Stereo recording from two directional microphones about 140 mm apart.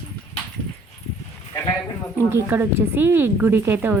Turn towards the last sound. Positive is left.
turn(degrees=-15)  # may be behind; listen again after turning